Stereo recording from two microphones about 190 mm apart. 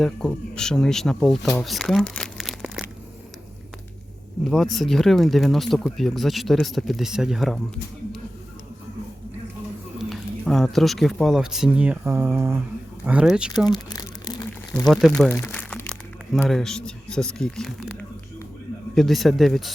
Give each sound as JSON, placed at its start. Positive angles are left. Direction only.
{"t": 0.0, "sound": "speech", "side_deg": 5}
{"t": 1.5, "sound": "crumpling", "side_deg": 0}
{"t": 4.4, "sound": "speech", "side_deg": 0}
{"t": 10.0, "sound": "speech", "side_deg": 0}
{"t": 13.7, "sound": "crumpling", "side_deg": 20}
{"t": 14.8, "sound": "speech", "side_deg": 5}
{"t": 18.9, "sound": "speech", "side_deg": 0}